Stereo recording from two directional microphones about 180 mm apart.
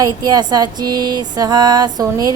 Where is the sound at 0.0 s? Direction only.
20° right (ahead or behind).